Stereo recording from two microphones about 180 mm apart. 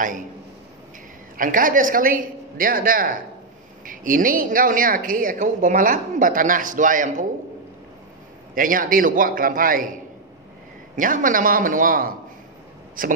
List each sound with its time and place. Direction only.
1.3 s a woman's voice: 50° right (ahead or behind)
8.5 s a woman's voice: 50° right (ahead or behind)
11.0 s a woman's voice: 45° right (ahead or behind)